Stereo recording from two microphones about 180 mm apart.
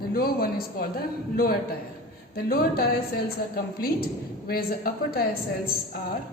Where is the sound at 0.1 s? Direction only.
55° left (ahead or behind).